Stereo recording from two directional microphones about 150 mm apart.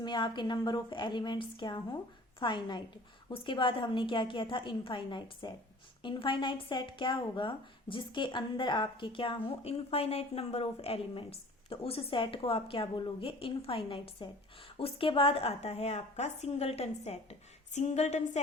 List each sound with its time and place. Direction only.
0.0 s speech: 30° left (ahead or behind); by 18.2 s 50° left (ahead or behind)